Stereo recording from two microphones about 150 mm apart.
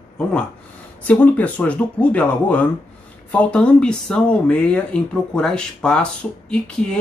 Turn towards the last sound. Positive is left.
turn(degrees=5)  # may be behind; listen again after turning